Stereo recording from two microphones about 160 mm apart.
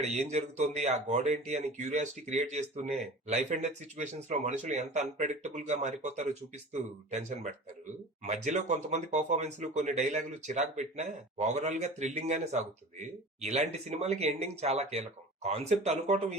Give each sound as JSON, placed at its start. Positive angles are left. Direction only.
{"t": 0.0, "sound": "speech", "side_deg": -45}